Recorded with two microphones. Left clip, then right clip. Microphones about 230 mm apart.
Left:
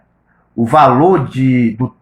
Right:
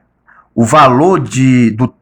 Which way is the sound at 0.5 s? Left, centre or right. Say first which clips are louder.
Right 2 dB; right.